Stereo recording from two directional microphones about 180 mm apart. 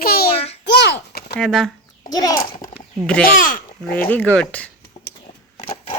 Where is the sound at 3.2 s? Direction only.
50° left (ahead or behind).